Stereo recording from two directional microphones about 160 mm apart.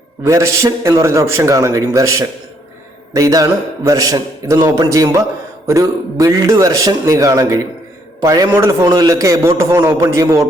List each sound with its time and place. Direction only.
0.3 s a man's voice: 20° right (ahead or behind)